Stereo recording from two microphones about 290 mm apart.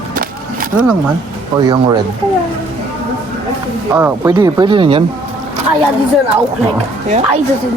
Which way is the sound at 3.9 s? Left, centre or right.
Centre.